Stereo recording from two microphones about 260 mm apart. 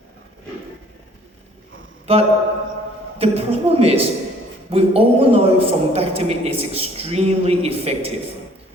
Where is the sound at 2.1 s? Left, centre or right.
Right.